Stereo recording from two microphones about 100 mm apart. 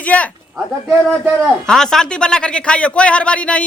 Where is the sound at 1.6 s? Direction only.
5° left (ahead or behind).